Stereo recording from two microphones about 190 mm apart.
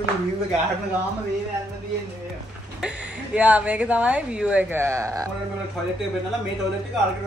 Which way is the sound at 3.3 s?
5° right (ahead or behind).